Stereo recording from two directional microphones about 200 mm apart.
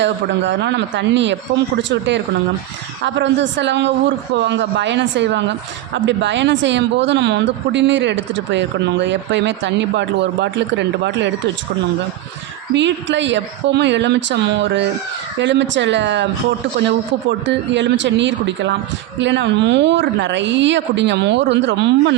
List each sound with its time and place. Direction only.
0.0 s speech: 60° right (ahead or behind)
12.7 s speech: 65° right (ahead or behind)
17.4 s speech: 65° right (ahead or behind)